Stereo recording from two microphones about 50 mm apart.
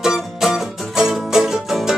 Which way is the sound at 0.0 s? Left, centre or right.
Centre.